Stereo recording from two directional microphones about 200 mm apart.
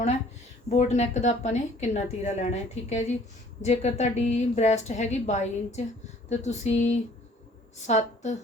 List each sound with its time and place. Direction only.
0.7 s a woman's voice: 35° left (ahead or behind)